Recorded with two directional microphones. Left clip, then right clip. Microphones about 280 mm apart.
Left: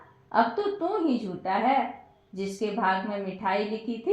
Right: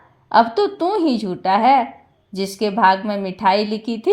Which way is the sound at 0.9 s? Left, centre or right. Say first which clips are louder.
Right 9 dB; right.